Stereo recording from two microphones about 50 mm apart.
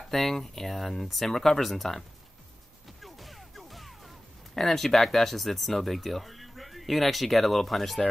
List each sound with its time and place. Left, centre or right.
0.1 s speech: centre
3.0 s music: centre
4.6 s speech: centre